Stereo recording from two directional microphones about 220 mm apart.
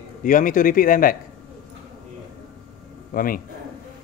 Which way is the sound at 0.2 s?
35° left (ahead or behind).